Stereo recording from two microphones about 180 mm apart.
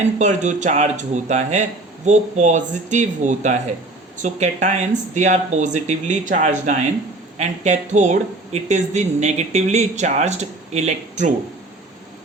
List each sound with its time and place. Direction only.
0.2 s speech: 40° right (ahead or behind)